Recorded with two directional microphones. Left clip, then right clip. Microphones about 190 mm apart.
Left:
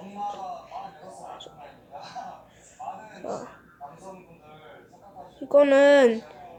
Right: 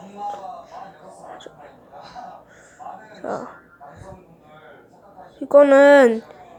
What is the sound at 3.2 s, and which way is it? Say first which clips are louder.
Speech: right 8 dB; 20° right (ahead or behind).